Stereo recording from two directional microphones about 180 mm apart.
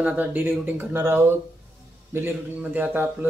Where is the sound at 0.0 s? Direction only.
10° right (ahead or behind).